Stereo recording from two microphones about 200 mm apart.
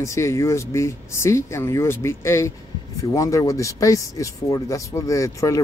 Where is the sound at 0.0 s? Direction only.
15° left (ahead or behind).